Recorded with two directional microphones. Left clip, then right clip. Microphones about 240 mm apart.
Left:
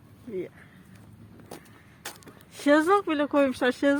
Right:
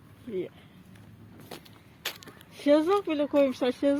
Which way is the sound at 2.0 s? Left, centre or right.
Left.